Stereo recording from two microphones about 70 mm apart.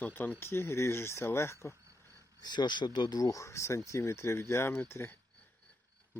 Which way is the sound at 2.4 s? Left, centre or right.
Left.